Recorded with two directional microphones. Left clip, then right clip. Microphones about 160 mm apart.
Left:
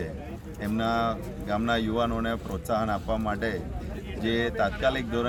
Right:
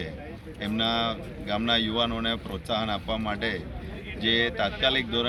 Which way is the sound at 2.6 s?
15° left (ahead or behind).